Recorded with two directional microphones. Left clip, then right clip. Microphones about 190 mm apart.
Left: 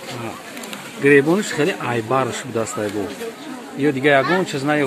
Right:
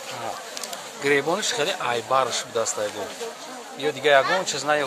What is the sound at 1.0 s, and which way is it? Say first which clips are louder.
Speech: left 8 dB; 5° right (ahead or behind).